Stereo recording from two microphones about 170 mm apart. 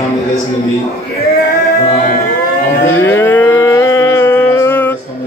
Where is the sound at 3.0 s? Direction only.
15° left (ahead or behind).